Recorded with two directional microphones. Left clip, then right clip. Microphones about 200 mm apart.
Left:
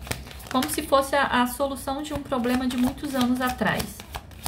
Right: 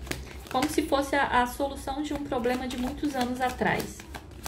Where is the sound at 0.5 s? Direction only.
5° left (ahead or behind).